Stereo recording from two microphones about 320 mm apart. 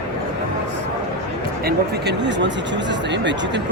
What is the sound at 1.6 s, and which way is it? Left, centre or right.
Speech, right.